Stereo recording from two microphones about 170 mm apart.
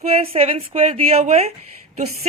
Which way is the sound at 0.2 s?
35° right (ahead or behind).